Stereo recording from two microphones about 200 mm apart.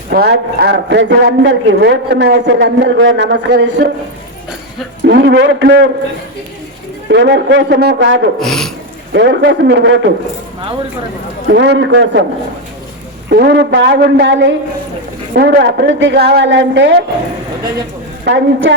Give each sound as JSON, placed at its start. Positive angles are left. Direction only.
{"t": 0.1, "sound": "a man's voice", "side_deg": -55}
{"t": 5.0, "sound": "a man's voice", "side_deg": -55}
{"t": 7.1, "sound": "a man's voice", "side_deg": -60}
{"t": 8.4, "sound": "speech", "side_deg": 0}
{"t": 9.1, "sound": "a man's voice", "side_deg": -60}
{"t": 11.5, "sound": "a man's voice", "side_deg": -60}
{"t": 13.3, "sound": "a man's voice", "side_deg": -55}
{"t": 18.3, "sound": "a man's voice", "side_deg": -65}